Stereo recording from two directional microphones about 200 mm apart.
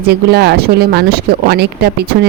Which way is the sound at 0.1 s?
55° right (ahead or behind).